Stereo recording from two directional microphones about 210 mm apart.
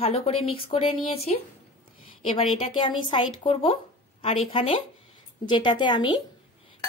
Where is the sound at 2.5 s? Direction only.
25° left (ahead or behind).